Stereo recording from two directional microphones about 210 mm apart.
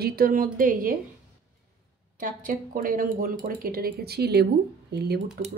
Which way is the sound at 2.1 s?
40° right (ahead or behind).